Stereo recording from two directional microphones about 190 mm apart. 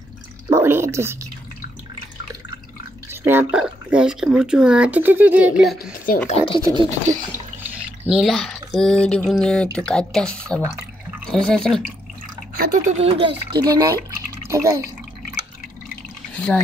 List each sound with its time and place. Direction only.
0.5 s drip: 15° right (ahead or behind)
3.1 s speech: 10° right (ahead or behind)
6.2 s speech: 30° left (ahead or behind)
6.6 s speech: 25° right (ahead or behind)
7.7 s speech: 5° right (ahead or behind)
12.5 s speech: 35° right (ahead or behind)
13.6 s speech: 20° right (ahead or behind)
16.3 s speech: 5° left (ahead or behind)